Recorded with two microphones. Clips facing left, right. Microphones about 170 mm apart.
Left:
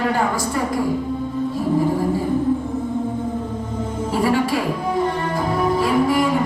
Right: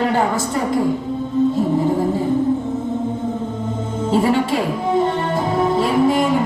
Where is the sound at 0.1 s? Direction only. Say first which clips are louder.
Right 2 dB; 25° right (ahead or behind).